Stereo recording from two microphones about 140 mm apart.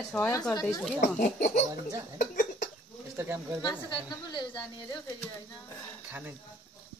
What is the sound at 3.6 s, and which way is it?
Speech, 30° left (ahead or behind).